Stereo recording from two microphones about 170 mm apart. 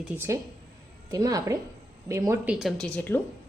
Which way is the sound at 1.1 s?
20° right (ahead or behind).